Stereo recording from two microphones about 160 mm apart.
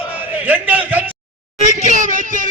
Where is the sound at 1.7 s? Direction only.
55° right (ahead or behind).